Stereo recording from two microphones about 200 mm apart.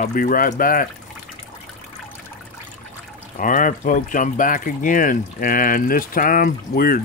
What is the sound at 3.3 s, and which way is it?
Speech, 40° left (ahead or behind).